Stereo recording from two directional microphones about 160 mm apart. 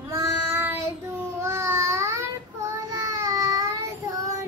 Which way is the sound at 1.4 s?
15° right (ahead or behind).